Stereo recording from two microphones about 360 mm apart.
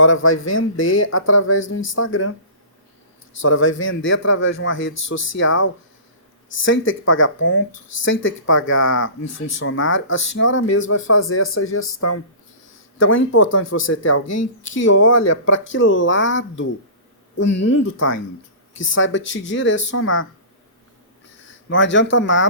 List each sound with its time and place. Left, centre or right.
0.0 s speech: left
3.3 s speech: left
4.9 s speech: left
5.4 s speech: left
9.6 s speech: left
21.4 s a sound: left
22.1 s speech: left